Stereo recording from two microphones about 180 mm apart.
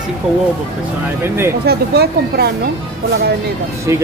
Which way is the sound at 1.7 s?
60° right (ahead or behind).